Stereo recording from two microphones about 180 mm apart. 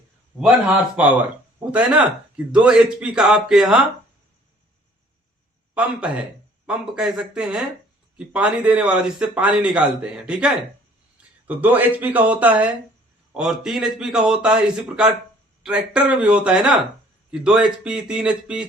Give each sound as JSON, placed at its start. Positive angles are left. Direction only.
{"t": 0.3, "sound": "a man's voice", "side_deg": -5}
{"t": 5.7, "sound": "a man's voice", "side_deg": -5}